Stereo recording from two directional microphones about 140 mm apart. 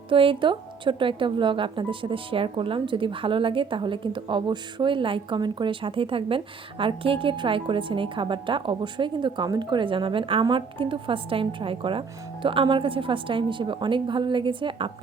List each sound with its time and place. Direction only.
0.1 s speech: 40° right (ahead or behind)